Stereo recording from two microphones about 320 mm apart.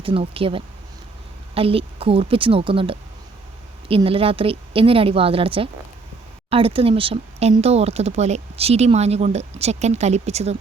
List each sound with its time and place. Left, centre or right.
0.0 s a woman's voice: centre